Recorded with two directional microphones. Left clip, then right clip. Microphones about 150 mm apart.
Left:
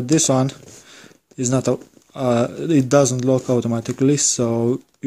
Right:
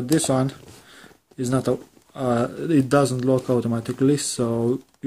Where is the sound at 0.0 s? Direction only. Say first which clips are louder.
Left 4 dB; 35° left (ahead or behind).